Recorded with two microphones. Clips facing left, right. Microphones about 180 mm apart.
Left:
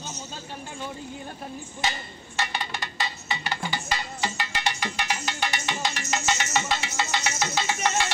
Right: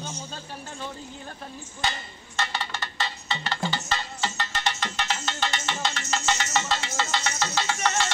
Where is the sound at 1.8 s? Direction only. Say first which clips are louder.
Even; 15° left (ahead or behind).